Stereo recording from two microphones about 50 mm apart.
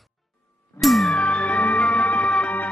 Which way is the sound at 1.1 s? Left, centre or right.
Left.